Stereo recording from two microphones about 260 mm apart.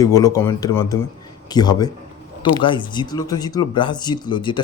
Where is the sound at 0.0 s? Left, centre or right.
Centre.